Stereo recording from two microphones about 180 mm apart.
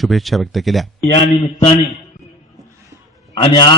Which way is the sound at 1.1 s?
35° left (ahead or behind).